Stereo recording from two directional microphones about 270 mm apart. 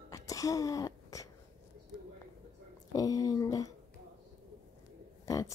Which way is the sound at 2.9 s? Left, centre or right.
Centre.